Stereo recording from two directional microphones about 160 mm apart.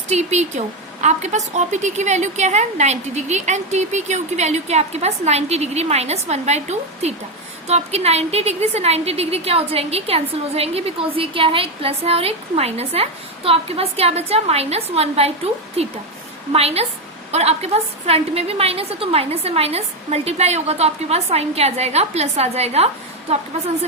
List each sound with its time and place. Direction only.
0.1 s a woman's voice: 45° right (ahead or behind)
16.5 s a woman's voice: 40° right (ahead or behind)